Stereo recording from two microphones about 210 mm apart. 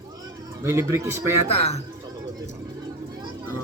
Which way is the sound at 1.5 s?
30° left (ahead or behind).